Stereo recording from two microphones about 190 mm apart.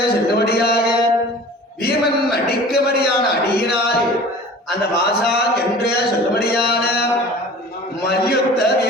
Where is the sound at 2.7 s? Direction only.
55° left (ahead or behind).